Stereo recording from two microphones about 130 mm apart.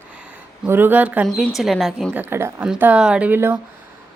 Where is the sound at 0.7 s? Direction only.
15° right (ahead or behind).